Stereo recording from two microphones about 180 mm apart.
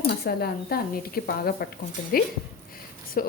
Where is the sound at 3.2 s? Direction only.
55° left (ahead or behind).